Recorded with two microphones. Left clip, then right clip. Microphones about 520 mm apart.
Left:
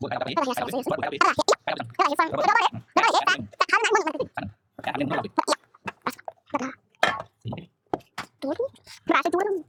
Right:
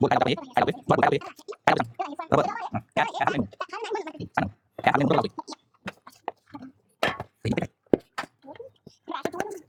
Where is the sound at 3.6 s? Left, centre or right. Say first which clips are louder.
Left 11 dB; left.